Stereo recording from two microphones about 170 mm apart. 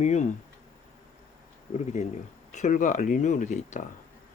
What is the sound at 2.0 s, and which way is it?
Speech, 45° left (ahead or behind).